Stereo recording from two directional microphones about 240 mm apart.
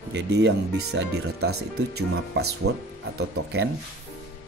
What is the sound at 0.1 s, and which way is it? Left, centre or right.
Speech, right.